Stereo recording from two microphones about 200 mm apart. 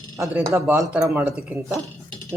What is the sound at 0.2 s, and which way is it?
Speech, 10° right (ahead or behind).